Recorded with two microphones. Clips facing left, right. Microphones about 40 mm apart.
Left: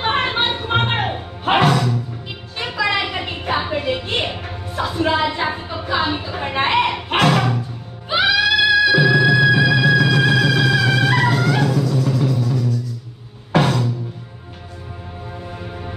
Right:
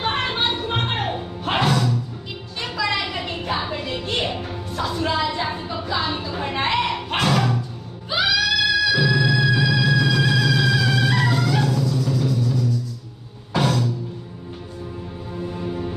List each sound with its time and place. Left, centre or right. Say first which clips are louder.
0.0 s music: left 4 dB; left
2.6 s a sound: left 4 dB; left
4.3 s music: even; centre
5.3 s a sound: left 3 dB; left
6.0 s music: left 2 dB; centre
13.6 s music: left 3 dB; left
15.3 s music: right 6 dB; centre